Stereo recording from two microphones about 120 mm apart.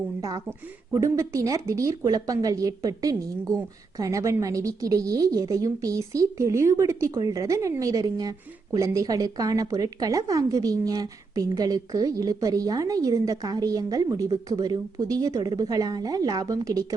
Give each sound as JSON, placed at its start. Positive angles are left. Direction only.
{"t": 0.2, "sound": "a woman's voice", "side_deg": -30}